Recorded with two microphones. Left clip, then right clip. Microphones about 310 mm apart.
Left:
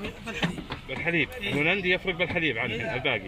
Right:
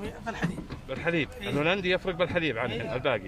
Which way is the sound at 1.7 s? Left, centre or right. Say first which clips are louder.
Left 1 dB; right.